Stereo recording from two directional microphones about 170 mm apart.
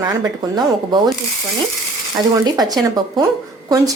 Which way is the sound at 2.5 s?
25° right (ahead or behind).